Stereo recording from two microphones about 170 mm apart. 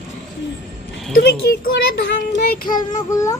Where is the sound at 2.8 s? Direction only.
20° left (ahead or behind).